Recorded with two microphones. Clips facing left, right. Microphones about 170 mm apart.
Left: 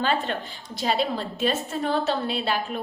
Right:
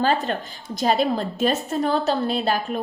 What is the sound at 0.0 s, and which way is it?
A woman's voice, 40° right (ahead or behind).